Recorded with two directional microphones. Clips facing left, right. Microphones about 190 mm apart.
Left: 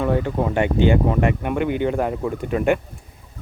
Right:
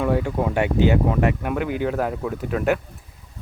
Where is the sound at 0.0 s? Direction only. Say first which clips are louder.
Left 1 dB; 5° right (ahead or behind).